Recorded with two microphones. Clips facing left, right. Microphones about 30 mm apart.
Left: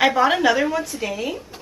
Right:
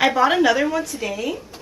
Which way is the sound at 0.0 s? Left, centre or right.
Centre.